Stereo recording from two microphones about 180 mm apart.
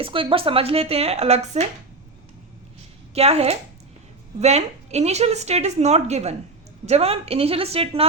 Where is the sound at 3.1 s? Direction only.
35° right (ahead or behind).